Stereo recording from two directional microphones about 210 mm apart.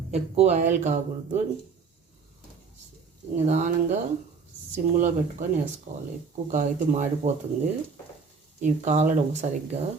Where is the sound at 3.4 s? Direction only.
35° right (ahead or behind).